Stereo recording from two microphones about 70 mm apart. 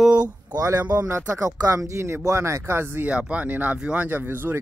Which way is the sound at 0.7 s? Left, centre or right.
Right.